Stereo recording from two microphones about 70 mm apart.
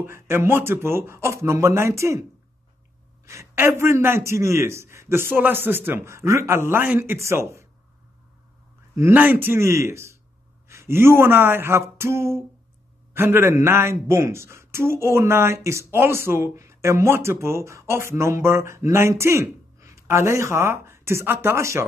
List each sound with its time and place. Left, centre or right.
0.0 s speech: right
3.5 s speech: right
9.1 s speech: right